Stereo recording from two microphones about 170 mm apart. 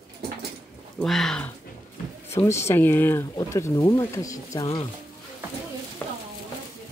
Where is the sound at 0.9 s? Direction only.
Centre (ahead or behind).